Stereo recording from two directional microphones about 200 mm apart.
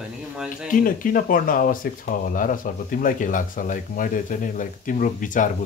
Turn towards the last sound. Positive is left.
turn(degrees=40)  # may be behind; listen again after turning